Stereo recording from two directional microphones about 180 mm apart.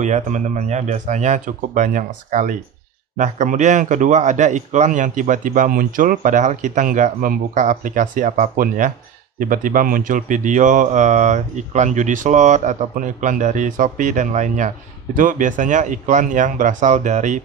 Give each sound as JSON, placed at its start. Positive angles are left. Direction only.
{"t": 0.0, "sound": "a man's voice", "side_deg": -40}